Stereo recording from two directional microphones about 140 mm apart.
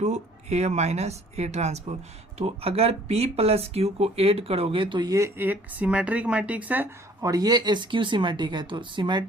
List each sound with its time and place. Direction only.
0.0 s speech: 55° right (ahead or behind); by 6.8 s 10° right (ahead or behind)
7.2 s speech: 25° right (ahead or behind)